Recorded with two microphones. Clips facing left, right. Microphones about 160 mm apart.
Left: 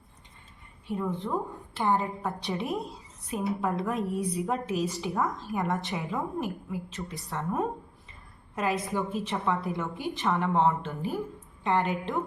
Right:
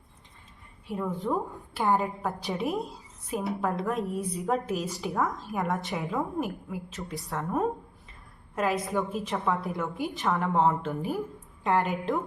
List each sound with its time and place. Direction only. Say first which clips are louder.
0.9 s a woman's voice: right 1 dB; centre (ahead or behind)